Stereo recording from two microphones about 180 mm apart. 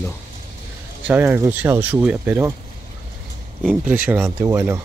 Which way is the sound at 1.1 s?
10° right (ahead or behind).